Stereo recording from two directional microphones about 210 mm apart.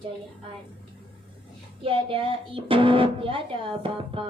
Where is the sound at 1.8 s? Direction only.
25° right (ahead or behind).